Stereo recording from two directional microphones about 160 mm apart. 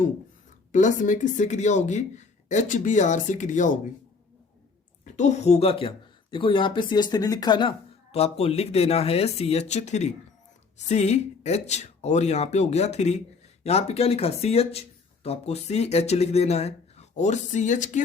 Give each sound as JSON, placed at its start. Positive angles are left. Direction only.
{"t": 0.7, "sound": "speech", "side_deg": 50}
{"t": 5.1, "sound": "speech", "side_deg": 45}
{"t": 8.1, "sound": "speech", "side_deg": 40}